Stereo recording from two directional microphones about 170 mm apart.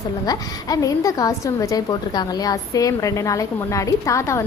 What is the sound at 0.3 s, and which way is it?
A woman's voice, 20° left (ahead or behind).